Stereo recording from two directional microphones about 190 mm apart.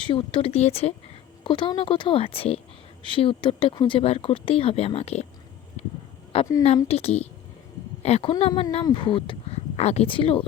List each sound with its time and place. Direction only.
0.0 s speech: 25° left (ahead or behind)
6.3 s a woman's voice: 30° left (ahead or behind)